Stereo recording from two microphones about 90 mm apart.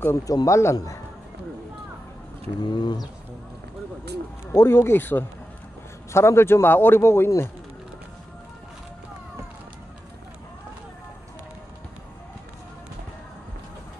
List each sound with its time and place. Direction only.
0.3 s a man's voice: 40° left (ahead or behind)
2.6 s speech: 55° left (ahead or behind)
4.5 s a man's voice: 30° left (ahead or behind)